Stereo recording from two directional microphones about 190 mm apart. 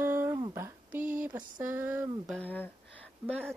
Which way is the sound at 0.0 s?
10° right (ahead or behind).